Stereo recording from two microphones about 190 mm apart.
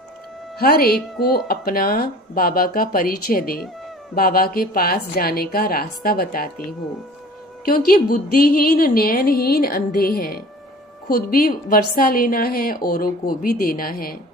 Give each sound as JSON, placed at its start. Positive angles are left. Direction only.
{"t": 0.6, "sound": "speech", "side_deg": 55}
{"t": 7.6, "sound": "speech", "side_deg": 50}